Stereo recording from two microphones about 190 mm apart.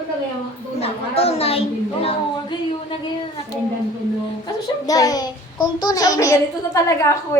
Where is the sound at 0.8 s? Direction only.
30° left (ahead or behind).